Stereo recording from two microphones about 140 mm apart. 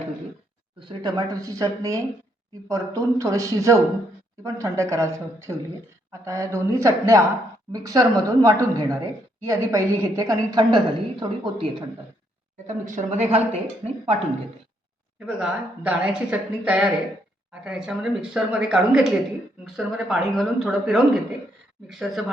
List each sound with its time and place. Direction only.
0.8 s a woman's voice: 30° right (ahead or behind)
12.6 s speech: 60° right (ahead or behind)
15.3 s a woman's voice: 5° right (ahead or behind)